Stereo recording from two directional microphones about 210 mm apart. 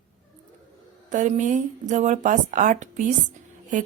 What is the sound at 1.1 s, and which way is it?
Speech, 35° right (ahead or behind).